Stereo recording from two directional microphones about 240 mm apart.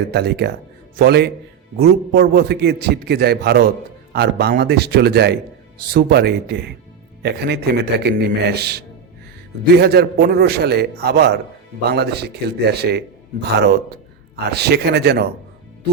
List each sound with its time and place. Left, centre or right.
0.1 s a man's voice: right